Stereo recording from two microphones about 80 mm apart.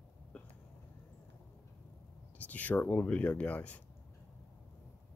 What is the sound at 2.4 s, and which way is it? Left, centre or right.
Speech, centre.